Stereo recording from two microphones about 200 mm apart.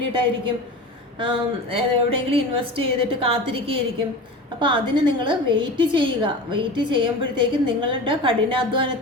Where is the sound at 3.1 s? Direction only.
25° right (ahead or behind).